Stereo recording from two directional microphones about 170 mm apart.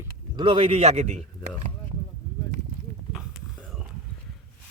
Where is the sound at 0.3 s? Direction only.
30° right (ahead or behind).